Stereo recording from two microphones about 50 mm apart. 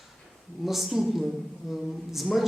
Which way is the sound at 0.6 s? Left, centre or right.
Centre.